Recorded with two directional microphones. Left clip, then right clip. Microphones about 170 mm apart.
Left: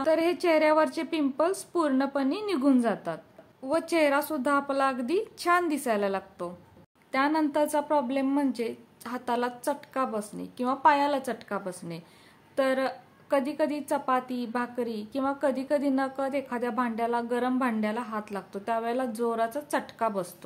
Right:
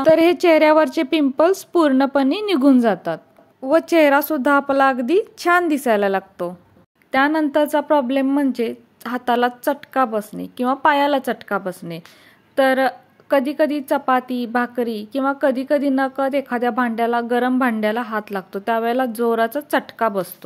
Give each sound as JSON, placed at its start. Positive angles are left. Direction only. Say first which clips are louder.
{"t": 0.0, "sound": "a woman's voice", "louder": "right 11 dB", "side_deg": -45}